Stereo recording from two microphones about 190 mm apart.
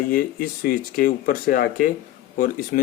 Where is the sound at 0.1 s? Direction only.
50° left (ahead or behind).